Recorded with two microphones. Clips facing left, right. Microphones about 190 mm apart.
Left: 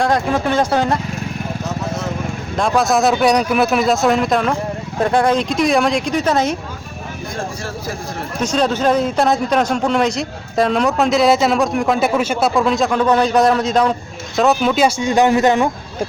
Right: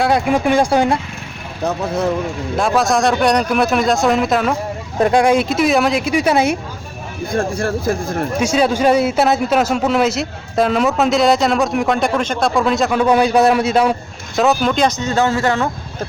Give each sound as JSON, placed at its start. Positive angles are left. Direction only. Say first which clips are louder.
{"t": 0.0, "sound": "speech", "louder": "right 2 dB", "side_deg": -10}
{"t": 2.6, "sound": "speech", "louder": "even", "side_deg": 0}
{"t": 8.4, "sound": "speech", "louder": "right 1 dB", "side_deg": -10}